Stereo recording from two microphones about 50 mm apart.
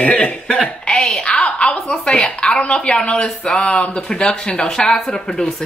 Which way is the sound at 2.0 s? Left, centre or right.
Left.